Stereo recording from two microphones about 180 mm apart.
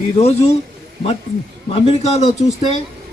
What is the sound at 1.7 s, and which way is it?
A man's voice, 35° left (ahead or behind).